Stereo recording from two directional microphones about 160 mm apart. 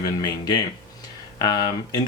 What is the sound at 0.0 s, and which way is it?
Speech, 25° left (ahead or behind).